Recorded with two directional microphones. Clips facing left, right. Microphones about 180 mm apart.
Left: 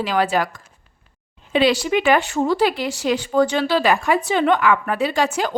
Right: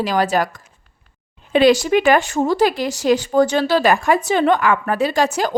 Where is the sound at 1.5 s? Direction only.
45° right (ahead or behind).